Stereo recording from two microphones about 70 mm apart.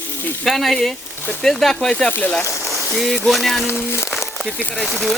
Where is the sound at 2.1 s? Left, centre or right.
Centre.